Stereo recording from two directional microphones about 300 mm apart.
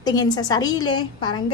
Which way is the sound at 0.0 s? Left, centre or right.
Centre.